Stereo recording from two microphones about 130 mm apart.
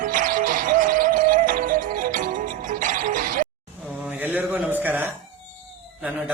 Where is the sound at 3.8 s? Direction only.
5° right (ahead or behind).